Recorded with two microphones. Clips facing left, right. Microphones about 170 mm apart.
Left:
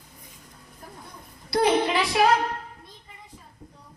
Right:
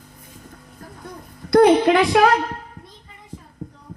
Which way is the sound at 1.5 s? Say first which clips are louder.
Right 9 dB; 60° right (ahead or behind).